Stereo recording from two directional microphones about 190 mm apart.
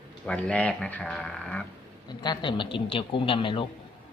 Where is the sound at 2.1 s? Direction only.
20° left (ahead or behind).